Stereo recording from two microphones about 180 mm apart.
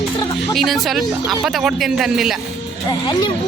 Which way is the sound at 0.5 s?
Centre (ahead or behind).